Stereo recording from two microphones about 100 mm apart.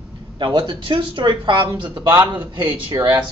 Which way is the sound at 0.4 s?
50° right (ahead or behind).